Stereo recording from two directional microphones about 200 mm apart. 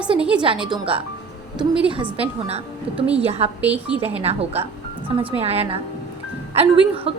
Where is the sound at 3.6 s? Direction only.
5° right (ahead or behind).